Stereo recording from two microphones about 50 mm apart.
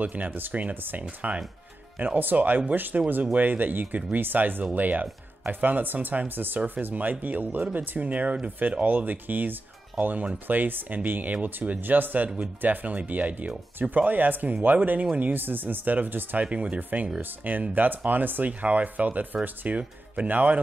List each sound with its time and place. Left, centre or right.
0.0 s speech: right
16.4 s speech: right